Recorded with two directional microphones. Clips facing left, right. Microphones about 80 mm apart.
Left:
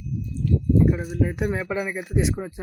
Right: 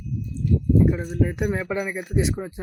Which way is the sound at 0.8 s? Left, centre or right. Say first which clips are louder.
Even; centre.